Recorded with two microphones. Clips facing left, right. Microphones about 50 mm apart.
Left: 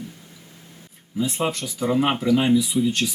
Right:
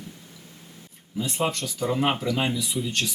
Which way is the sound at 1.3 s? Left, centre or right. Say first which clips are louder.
Left 1 dB; centre.